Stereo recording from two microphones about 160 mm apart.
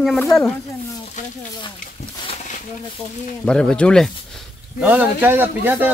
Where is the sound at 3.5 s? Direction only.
5° left (ahead or behind).